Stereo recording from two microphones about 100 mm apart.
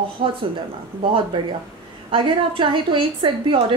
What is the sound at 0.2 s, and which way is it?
Speech, 60° right (ahead or behind).